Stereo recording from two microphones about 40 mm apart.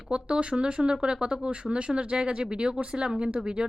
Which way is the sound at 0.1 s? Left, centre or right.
Right.